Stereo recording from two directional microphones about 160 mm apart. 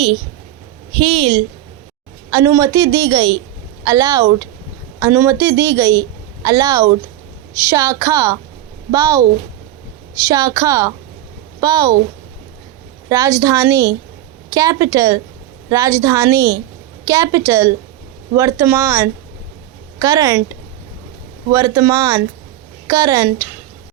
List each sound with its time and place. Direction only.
0.9 s a woman's voice: 35° right (ahead or behind)
2.3 s a woman's voice: 20° right (ahead or behind)
10.2 s a woman's voice: 20° right (ahead or behind)
13.1 s a woman's voice: 20° right (ahead or behind)